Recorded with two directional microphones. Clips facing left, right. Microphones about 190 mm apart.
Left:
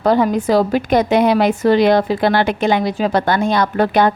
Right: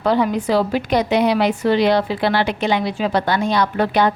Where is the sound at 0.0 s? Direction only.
45° left (ahead or behind).